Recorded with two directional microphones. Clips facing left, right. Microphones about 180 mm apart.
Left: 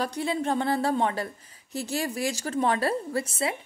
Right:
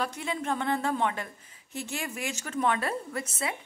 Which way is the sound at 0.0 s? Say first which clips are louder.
Left 4 dB; 35° left (ahead or behind).